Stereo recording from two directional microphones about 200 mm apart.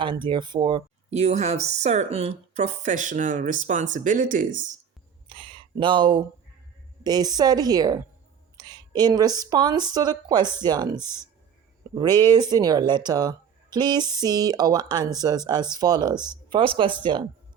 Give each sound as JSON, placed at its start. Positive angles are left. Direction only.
{"t": 0.0, "sound": "speech", "side_deg": -25}
{"t": 5.3, "sound": "a sound", "side_deg": -25}
{"t": 7.0, "sound": "speech", "side_deg": -20}
{"t": 11.0, "sound": "speech", "side_deg": 15}
{"t": 11.9, "sound": "speech", "side_deg": -20}